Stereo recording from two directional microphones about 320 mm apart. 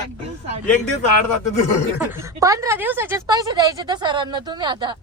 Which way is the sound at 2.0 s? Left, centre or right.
Centre.